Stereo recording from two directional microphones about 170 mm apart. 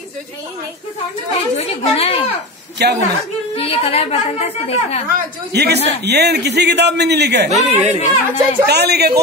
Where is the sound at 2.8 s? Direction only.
75° right (ahead or behind).